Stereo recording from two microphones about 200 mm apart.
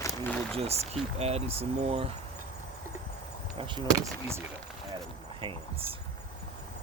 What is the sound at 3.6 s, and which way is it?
Speech, 25° right (ahead or behind).